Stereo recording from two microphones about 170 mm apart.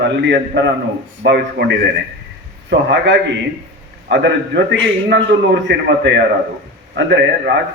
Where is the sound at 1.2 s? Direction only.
85° right.